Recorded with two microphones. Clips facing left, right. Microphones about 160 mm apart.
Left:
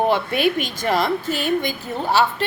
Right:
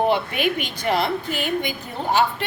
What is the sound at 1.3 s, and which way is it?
Music, 15° right (ahead or behind).